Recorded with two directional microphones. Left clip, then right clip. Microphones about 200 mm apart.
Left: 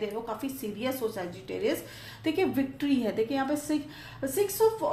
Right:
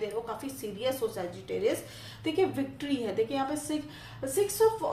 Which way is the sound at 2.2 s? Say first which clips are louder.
Left 1 dB; 40° left (ahead or behind).